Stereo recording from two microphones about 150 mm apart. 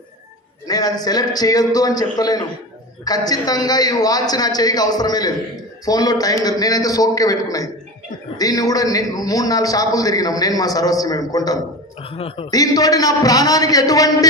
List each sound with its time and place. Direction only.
0.7 s a man's voice: 25° left (ahead or behind)
12.1 s a man's voice: 40° left (ahead or behind)
12.5 s a man's voice: 25° left (ahead or behind)